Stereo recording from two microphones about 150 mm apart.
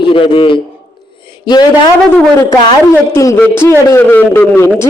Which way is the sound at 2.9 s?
15° left (ahead or behind).